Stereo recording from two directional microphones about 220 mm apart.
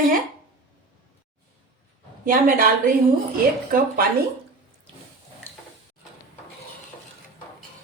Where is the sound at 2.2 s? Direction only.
40° right (ahead or behind).